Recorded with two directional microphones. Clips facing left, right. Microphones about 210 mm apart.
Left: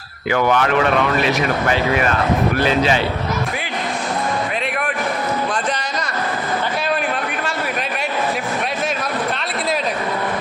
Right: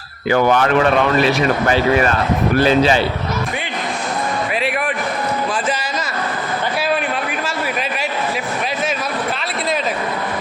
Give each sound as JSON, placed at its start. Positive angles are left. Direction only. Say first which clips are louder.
{"t": 0.3, "sound": "speech", "louder": "right 3 dB", "side_deg": -35}